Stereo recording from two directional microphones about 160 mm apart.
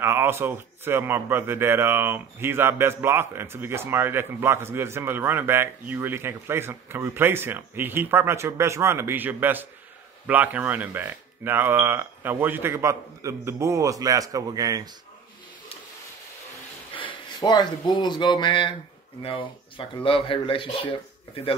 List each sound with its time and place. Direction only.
0.0 s a man's voice: 15° right (ahead or behind)
16.9 s speech: 30° left (ahead or behind)